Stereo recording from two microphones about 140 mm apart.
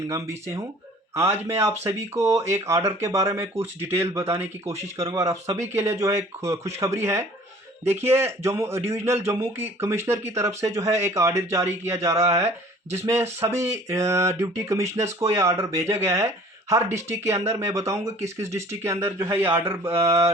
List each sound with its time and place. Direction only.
0.1 s speech: 20° right (ahead or behind)